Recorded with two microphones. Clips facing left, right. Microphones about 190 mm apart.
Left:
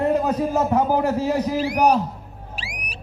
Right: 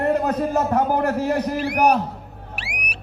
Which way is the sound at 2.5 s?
65° right (ahead or behind).